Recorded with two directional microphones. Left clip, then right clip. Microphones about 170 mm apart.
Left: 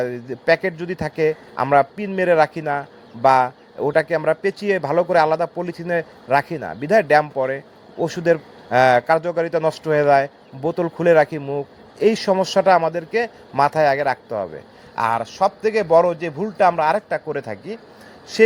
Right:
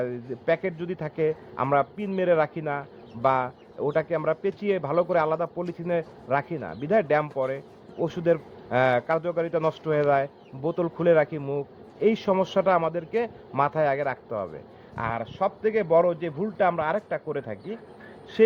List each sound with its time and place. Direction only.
0.0 s a man's voice: 35° left (ahead or behind)